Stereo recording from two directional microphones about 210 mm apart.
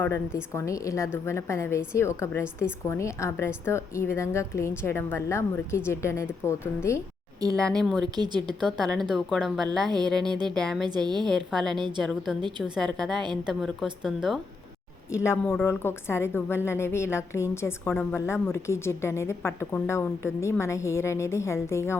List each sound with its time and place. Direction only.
0.5 s a woman's voice: 15° left (ahead or behind)
7.5 s speech: 5° left (ahead or behind)
8.0 s a woman's voice: 20° right (ahead or behind)
8.6 s speech: centre (ahead or behind)
10.2 s a woman's voice: 20° right (ahead or behind)
10.5 s speech: centre (ahead or behind)
10.8 s a woman's voice: 20° right (ahead or behind)
11.3 s speech: centre (ahead or behind)
11.8 s a woman's voice: 20° right (ahead or behind)
12.0 s speech: centre (ahead or behind)
15.1 s a woman's voice: 10° left (ahead or behind)